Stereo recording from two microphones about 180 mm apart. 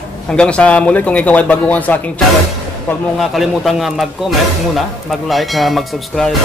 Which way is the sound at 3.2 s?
Centre (ahead or behind).